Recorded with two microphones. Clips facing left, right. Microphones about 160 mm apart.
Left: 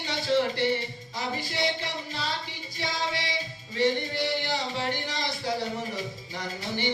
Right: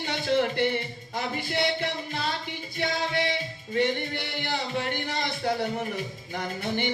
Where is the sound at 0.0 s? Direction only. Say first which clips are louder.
Right 1 dB; 55° right (ahead or behind).